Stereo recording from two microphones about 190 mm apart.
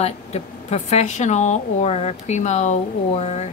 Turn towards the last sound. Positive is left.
turn(degrees=35)  # may be behind; listen again after turning